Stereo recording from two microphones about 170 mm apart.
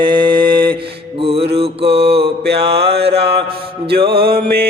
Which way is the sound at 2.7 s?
75° right (ahead or behind).